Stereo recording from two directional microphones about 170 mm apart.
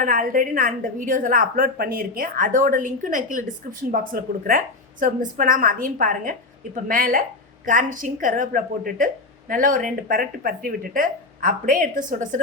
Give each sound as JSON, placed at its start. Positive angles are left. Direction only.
{"t": 0.0, "sound": "a woman's voice", "side_deg": -55}